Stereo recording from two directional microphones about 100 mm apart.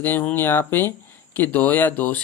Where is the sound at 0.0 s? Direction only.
20° left (ahead or behind).